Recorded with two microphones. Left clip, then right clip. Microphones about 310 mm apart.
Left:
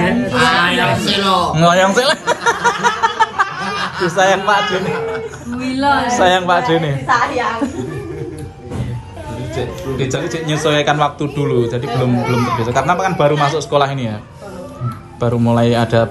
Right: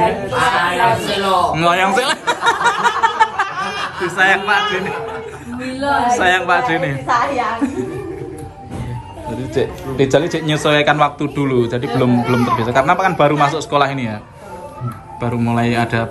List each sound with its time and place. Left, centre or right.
0.0 s a sound: centre
5.6 s speech: centre
9.9 s speech: centre
15.1 s speech: centre